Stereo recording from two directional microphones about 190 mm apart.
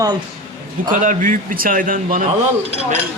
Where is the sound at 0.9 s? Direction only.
45° right (ahead or behind).